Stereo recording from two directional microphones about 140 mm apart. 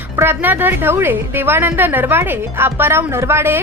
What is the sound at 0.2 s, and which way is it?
A woman's voice, 15° right (ahead or behind).